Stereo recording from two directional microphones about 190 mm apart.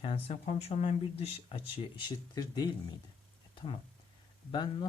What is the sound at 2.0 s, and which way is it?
Speech, 20° left (ahead or behind).